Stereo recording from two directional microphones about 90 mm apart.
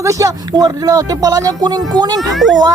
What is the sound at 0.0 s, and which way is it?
Speech, 35° right (ahead or behind).